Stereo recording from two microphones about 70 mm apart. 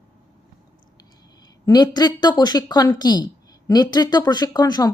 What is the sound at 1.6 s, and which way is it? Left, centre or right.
Speech, left.